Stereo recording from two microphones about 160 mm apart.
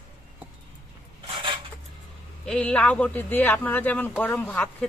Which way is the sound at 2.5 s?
10° left (ahead or behind).